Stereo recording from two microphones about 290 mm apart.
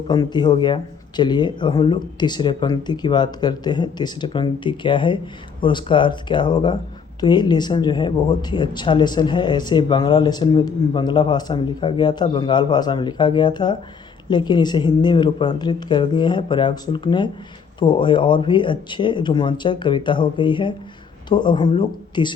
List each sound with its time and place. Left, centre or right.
0.1 s speech: centre